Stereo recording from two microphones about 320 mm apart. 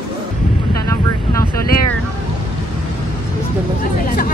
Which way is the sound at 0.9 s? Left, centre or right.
Centre.